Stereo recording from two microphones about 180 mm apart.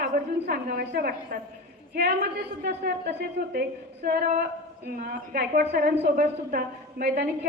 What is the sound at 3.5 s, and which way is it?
A woman's voice, 55° right (ahead or behind).